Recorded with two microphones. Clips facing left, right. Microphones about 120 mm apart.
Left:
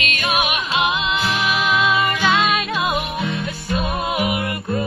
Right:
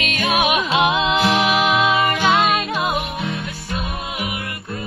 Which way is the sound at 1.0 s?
80° right.